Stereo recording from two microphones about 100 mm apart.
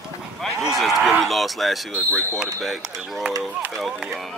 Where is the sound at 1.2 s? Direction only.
Centre (ahead or behind).